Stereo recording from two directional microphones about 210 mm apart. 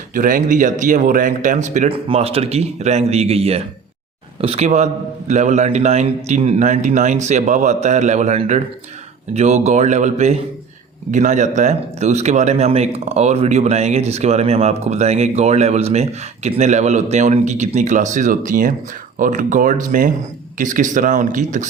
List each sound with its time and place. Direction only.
0.1 s a man's voice: 40° right (ahead or behind)